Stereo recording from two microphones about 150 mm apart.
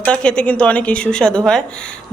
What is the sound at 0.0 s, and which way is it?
A woman's voice, 5° left (ahead or behind).